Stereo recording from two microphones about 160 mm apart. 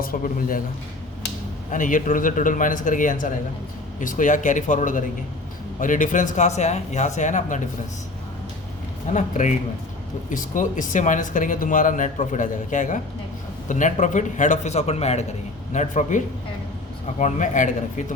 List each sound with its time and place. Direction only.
0.0 s a man's voice: 65° left (ahead or behind)
1.7 s a man's voice: 55° left (ahead or behind)
9.1 s speech: 50° left (ahead or behind)